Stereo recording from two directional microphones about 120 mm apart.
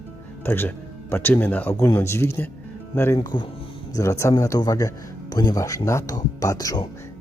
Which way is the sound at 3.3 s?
40° left (ahead or behind).